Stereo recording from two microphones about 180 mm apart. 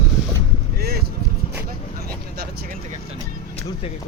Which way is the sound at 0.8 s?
60° right (ahead or behind).